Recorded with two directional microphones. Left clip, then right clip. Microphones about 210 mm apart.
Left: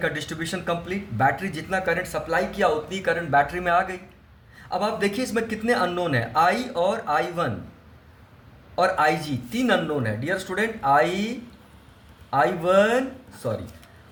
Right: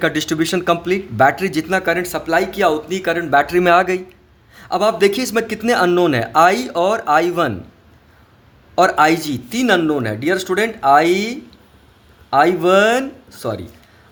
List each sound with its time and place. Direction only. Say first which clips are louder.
0.0 s speech: right 10 dB; 50° right (ahead or behind)
8.7 s speech: right 8 dB; 50° right (ahead or behind)